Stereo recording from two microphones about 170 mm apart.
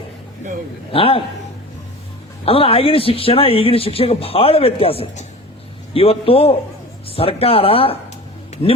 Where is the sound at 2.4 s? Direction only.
35° left (ahead or behind).